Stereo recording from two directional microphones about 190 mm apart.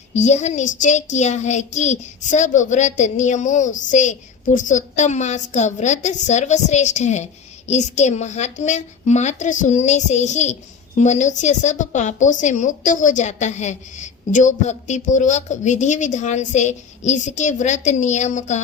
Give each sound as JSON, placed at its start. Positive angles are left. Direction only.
{"t": 0.1, "sound": "a woman's voice", "side_deg": 35}